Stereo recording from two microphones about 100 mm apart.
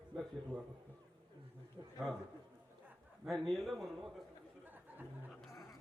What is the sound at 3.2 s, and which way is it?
Speech, centre (ahead or behind).